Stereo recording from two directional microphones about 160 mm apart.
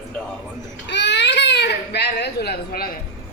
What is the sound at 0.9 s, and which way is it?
Baby cry, 90° left.